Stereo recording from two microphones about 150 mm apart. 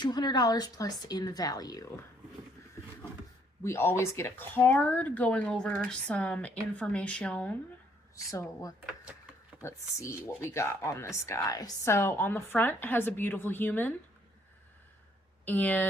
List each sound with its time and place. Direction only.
0.0 s speech: 30° left (ahead or behind)
3.6 s speech: 15° left (ahead or behind)
8.1 s speech: 20° left (ahead or behind)
15.4 s speech: 10° left (ahead or behind)